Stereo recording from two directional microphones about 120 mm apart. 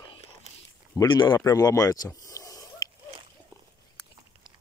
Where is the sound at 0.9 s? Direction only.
40° left (ahead or behind).